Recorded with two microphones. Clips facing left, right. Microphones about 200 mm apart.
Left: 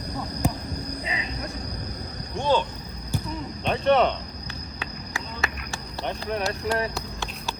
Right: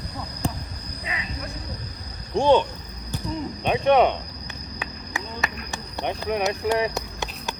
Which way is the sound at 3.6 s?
15° right (ahead or behind).